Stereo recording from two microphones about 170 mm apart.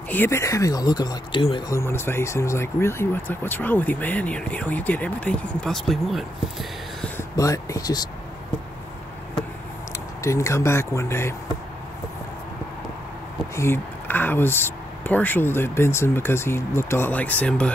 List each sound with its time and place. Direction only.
0.1 s speech: 15° left (ahead or behind)
1.8 s speech: 15° left (ahead or behind)
7.3 s speech: 20° left (ahead or behind)
10.2 s speech: 15° left (ahead or behind)
13.6 s speech: 10° left (ahead or behind)